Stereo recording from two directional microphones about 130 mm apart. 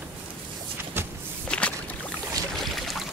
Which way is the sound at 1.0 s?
15° right (ahead or behind).